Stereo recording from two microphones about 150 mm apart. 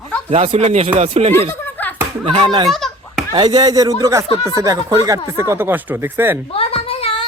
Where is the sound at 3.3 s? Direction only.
30° right (ahead or behind); by 6.3 s 15° right (ahead or behind).